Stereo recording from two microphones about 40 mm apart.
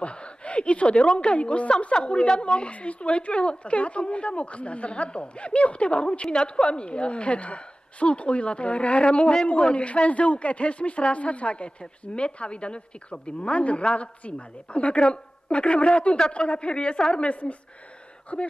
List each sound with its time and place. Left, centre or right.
0.0 s a woman's voice: left
17.3 s speech: left